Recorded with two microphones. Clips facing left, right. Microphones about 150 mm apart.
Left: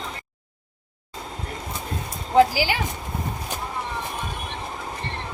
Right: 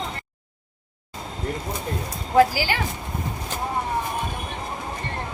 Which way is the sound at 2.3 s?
15° left (ahead or behind).